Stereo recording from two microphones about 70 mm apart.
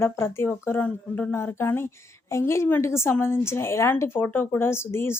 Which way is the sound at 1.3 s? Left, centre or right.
Left.